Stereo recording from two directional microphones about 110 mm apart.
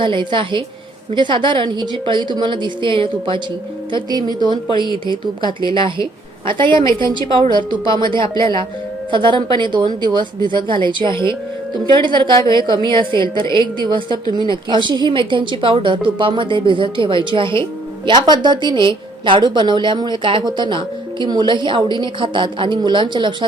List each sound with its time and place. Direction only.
0.0 s a woman's voice: 45° right (ahead or behind)
3.9 s a woman's voice: 40° right (ahead or behind)